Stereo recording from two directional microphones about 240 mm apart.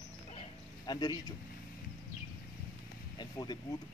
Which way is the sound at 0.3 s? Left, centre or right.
Left.